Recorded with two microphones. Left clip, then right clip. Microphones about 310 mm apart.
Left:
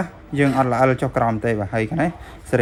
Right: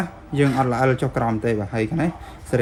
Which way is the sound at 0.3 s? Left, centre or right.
Left.